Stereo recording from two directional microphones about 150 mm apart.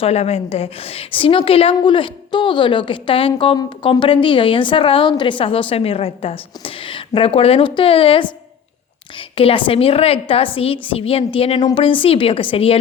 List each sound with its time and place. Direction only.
0.0 s a woman's voice: 45° left (ahead or behind)